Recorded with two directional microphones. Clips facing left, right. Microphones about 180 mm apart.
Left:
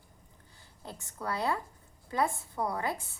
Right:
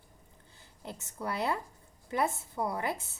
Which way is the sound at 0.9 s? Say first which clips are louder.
Even; 20° right (ahead or behind).